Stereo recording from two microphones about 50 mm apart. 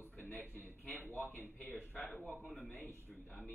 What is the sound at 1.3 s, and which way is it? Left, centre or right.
Speech, left.